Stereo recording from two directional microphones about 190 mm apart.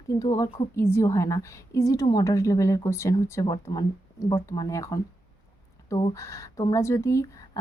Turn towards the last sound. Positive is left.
turn(degrees=15)  # may be behind; listen again after turning